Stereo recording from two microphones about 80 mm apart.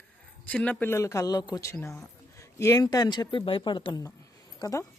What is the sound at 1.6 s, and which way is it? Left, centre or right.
Speech, left.